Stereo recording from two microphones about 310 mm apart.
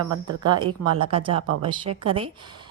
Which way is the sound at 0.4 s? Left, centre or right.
Centre.